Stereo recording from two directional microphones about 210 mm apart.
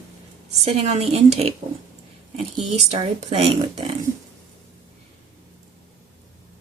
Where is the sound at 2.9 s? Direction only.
30° right (ahead or behind).